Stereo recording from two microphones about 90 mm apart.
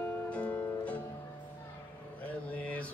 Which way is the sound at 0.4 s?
15° left (ahead or behind).